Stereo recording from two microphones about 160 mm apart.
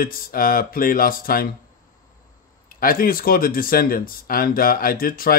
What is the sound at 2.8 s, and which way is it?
Speech, 65° left (ahead or behind).